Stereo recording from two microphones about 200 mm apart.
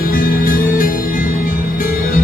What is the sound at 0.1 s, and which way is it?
Music, 45° left (ahead or behind).